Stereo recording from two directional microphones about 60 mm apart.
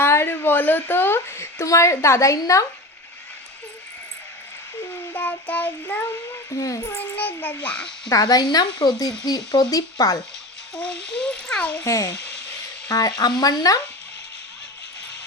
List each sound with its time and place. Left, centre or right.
0.0 s a sound: left
1.6 s a woman's voice: left
5.1 s child singing: left
6.6 s a woman's voice: left
6.9 s a child's voice: left; by 8.1 s centre
8.1 s speech: left
10.8 s speech: centre
11.9 s a woman's voice: left
12.9 s speech: left